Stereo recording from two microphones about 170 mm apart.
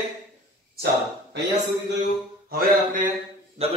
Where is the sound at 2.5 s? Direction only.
55° right (ahead or behind).